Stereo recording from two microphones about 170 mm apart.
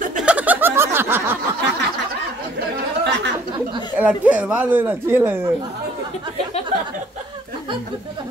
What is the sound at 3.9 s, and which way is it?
Speech, 10° right (ahead or behind).